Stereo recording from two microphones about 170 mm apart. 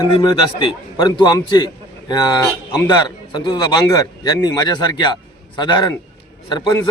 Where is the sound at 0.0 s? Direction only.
25° left (ahead or behind).